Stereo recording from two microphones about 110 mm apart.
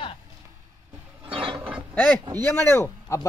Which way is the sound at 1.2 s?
50° right (ahead or behind).